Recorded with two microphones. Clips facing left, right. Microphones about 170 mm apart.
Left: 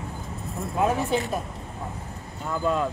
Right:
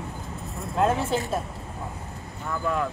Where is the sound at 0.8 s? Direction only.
Centre (ahead or behind).